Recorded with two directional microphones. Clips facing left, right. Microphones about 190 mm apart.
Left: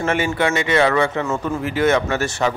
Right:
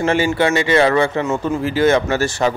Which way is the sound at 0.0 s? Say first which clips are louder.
Right 3 dB; 30° right (ahead or behind).